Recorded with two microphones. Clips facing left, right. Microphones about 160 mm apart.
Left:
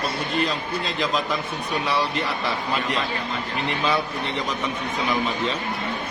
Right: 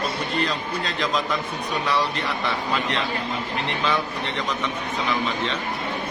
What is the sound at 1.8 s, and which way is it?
Speech, centre (ahead or behind).